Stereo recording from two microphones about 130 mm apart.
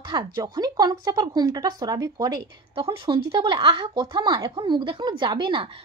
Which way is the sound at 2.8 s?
45° right (ahead or behind).